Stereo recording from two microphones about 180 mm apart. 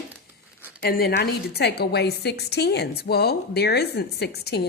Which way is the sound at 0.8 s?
60° left (ahead or behind).